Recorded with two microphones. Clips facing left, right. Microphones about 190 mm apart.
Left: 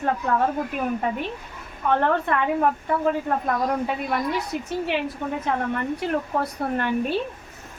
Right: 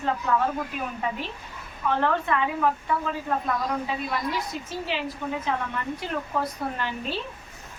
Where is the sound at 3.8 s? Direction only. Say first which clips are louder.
Left 4 dB; 60° left (ahead or behind).